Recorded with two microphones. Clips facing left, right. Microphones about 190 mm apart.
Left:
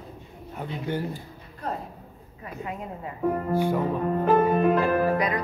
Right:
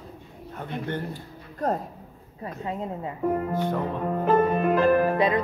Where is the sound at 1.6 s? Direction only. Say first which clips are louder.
Right 6 dB; 45° right (ahead or behind).